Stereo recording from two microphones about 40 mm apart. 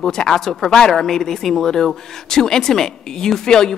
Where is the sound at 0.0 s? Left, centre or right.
Centre.